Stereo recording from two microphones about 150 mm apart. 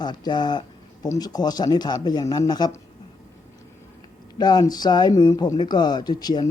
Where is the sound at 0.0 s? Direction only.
30° left (ahead or behind).